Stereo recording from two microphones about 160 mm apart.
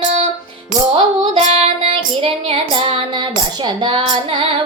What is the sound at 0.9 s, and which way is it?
Music, 30° right (ahead or behind).